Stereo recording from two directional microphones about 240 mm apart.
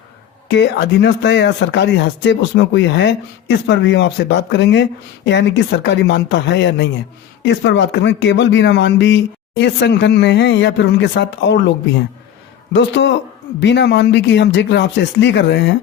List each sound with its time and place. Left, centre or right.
0.4 s speech: left